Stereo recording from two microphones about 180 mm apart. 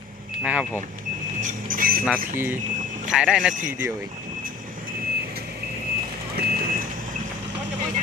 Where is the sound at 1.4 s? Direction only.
45° right (ahead or behind).